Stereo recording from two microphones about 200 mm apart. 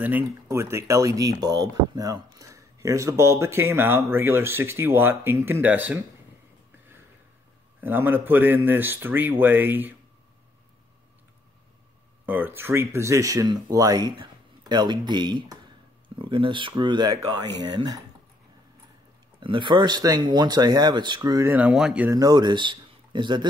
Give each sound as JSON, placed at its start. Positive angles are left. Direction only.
{"t": 0.0, "sound": "speech", "side_deg": -10}
{"t": 7.8, "sound": "speech", "side_deg": -10}
{"t": 12.3, "sound": "speech", "side_deg": -10}
{"t": 19.4, "sound": "speech", "side_deg": -25}